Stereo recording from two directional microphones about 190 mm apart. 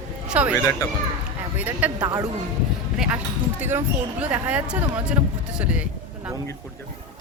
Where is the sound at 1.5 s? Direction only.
10° right (ahead or behind).